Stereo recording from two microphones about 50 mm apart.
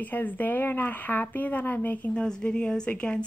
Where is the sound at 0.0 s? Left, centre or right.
Left.